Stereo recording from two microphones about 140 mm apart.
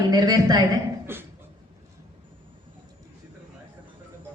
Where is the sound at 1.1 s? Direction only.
15° right (ahead or behind).